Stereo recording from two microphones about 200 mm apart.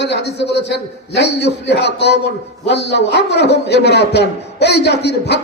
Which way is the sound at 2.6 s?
60° left (ahead or behind).